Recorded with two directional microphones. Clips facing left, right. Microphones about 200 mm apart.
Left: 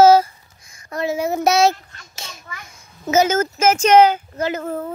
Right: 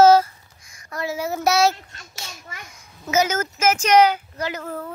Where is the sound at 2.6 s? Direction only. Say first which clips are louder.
Left 7 dB; 25° left (ahead or behind).